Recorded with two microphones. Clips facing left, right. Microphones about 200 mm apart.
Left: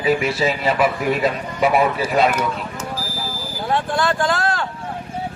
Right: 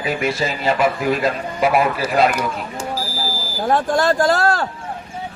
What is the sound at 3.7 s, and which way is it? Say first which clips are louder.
Speech: right 4 dB; 45° right (ahead or behind).